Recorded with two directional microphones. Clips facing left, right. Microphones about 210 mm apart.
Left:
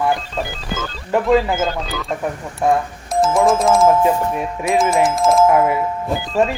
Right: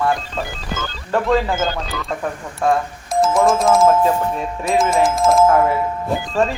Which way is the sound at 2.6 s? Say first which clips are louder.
Left 1 dB; 20° left (ahead or behind).